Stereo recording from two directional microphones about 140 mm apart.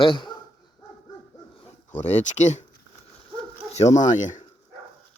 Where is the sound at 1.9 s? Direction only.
60° left (ahead or behind).